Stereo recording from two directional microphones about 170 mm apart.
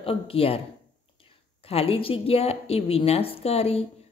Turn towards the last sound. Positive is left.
turn(degrees=35)  # may be behind; listen again after turning